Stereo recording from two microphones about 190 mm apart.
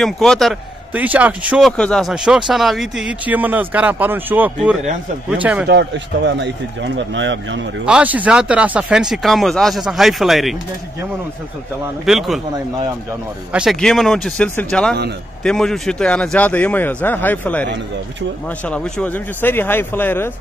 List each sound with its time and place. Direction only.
0.0 s speech: centre (ahead or behind)
1.7 s speech: 5° left (ahead or behind)
5.7 s speech: 65° right (ahead or behind)
7.8 s speech: 5° right (ahead or behind)
12.1 s speech: centre (ahead or behind)
13.5 s a man's voice: centre (ahead or behind)
18.7 s a man's voice: 5° left (ahead or behind)